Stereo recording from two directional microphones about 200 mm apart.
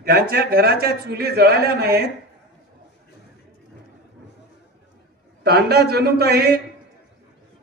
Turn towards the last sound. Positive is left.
turn(degrees=-50)  # may be behind; listen again after turning